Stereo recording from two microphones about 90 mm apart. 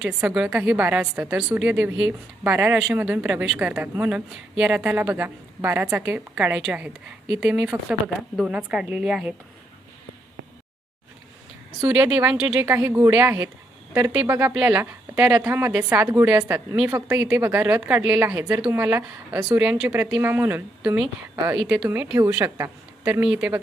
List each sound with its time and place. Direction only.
0.0 s a woman's voice: 10° right (ahead or behind)
2.7 s a woman's voice: 10° right (ahead or behind)
11.9 s a woman's voice: 15° right (ahead or behind)
12.6 s a woman's voice: 25° right (ahead or behind)
14.5 s a woman's voice: 10° right (ahead or behind)
15.3 s a woman's voice: 30° right (ahead or behind)
19.5 s a woman's voice: 10° right (ahead or behind)
19.9 s a woman's voice: 25° right (ahead or behind)
20.8 s a woman's voice: 10° right (ahead or behind)
21.8 s a woman's voice: 20° right (ahead or behind)
22.5 s a man's voice: 30° right (ahead or behind)
23.2 s a woman's voice: 10° right (ahead or behind)